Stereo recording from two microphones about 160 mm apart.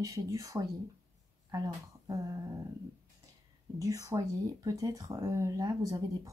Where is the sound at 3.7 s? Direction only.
20° right (ahead or behind).